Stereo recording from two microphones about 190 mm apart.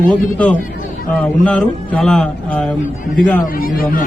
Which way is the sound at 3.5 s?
50° left (ahead or behind).